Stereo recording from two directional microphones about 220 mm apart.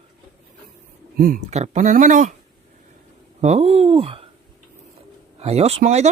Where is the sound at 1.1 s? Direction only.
40° right (ahead or behind).